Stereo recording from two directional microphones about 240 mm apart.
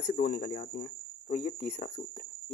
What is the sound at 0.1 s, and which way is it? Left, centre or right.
Speech, left.